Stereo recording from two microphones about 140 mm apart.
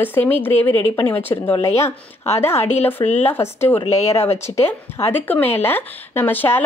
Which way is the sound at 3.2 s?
15° left (ahead or behind).